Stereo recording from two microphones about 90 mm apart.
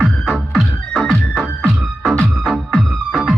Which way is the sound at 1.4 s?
Centre (ahead or behind).